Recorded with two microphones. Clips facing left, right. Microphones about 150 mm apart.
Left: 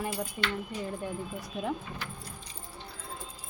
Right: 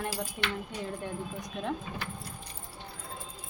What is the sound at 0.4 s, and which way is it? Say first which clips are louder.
Speech: left 1 dB; centre (ahead or behind).